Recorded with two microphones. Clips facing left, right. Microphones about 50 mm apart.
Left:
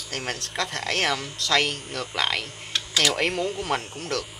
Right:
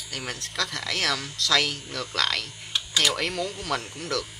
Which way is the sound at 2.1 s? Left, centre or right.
Centre.